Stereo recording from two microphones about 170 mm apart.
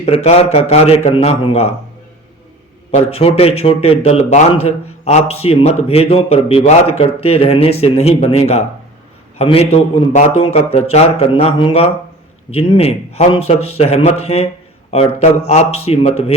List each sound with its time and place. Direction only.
0.0 s a man's voice: 35° left (ahead or behind)
2.9 s a man's voice: 35° left (ahead or behind)